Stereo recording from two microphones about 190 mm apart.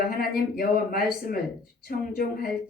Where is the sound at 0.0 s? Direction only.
50° left (ahead or behind).